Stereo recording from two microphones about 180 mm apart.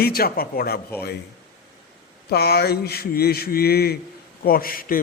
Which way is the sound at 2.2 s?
65° left (ahead or behind).